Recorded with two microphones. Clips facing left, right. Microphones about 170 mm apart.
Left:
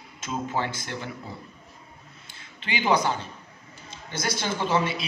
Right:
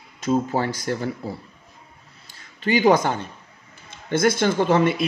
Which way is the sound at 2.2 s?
40° right (ahead or behind).